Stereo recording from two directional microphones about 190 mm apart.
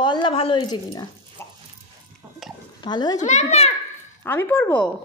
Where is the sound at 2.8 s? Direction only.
20° left (ahead or behind).